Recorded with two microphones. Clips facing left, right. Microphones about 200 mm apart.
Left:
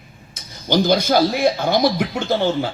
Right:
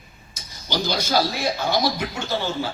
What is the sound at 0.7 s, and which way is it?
Speech, 50° left (ahead or behind).